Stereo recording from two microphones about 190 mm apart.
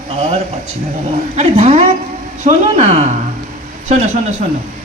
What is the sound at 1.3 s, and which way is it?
A man's voice, 35° right (ahead or behind).